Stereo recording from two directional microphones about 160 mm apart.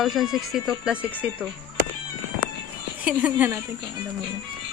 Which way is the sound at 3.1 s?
10° right (ahead or behind).